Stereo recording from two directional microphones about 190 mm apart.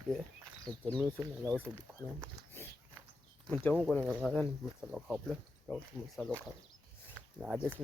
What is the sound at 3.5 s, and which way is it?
Speech, 10° left (ahead or behind).